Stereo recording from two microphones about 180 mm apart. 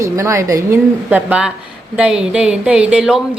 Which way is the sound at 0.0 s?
15° right (ahead or behind).